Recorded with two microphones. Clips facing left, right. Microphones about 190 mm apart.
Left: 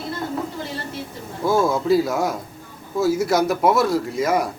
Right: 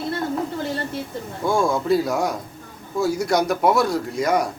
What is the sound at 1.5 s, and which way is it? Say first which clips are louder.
A man's voice: left 2 dB; 5° left (ahead or behind).